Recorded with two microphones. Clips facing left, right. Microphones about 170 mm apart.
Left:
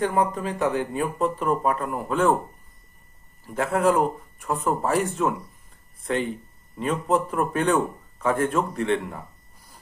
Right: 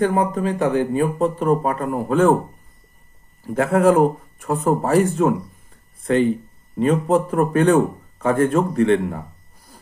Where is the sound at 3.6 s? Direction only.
50° right (ahead or behind).